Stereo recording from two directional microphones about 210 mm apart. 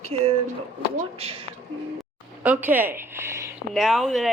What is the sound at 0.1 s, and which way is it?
Speech, 30° right (ahead or behind).